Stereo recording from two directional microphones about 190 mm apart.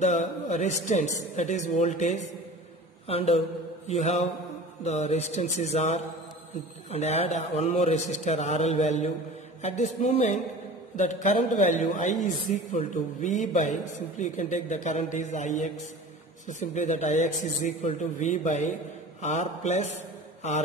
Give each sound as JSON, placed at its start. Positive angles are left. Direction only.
{"t": 0.0, "sound": "a man's voice", "side_deg": 35}
{"t": 3.1, "sound": "mantra", "side_deg": 30}
{"t": 4.8, "sound": "a man's voice", "side_deg": 35}